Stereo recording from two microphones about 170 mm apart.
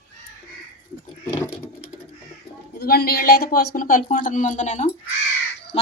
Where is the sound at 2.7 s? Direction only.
65° left (ahead or behind).